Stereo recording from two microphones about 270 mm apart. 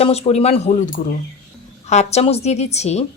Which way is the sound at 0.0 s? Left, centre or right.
Left.